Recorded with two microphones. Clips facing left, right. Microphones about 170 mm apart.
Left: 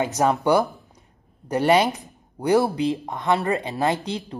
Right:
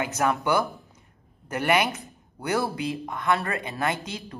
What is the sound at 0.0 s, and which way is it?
Speech, 20° left (ahead or behind).